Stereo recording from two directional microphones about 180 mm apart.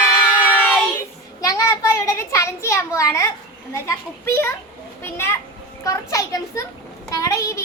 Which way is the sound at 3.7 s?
15° left (ahead or behind).